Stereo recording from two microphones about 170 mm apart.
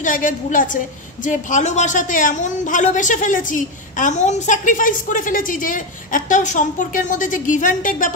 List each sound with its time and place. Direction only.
0.0 s a woman's voice: 50° left (ahead or behind)